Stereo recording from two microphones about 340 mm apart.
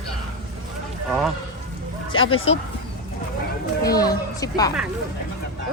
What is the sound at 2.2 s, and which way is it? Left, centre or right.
Speech, centre.